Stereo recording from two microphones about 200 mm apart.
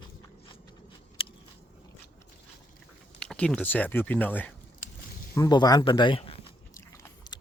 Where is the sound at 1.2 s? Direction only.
25° left (ahead or behind).